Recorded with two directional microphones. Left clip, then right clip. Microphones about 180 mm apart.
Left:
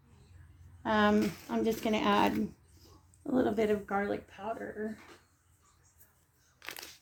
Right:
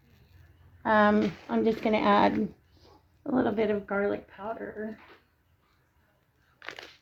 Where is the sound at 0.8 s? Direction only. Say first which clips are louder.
Right 5 dB; 35° right (ahead or behind).